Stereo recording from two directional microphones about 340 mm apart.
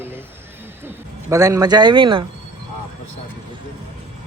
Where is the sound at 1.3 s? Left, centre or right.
Centre.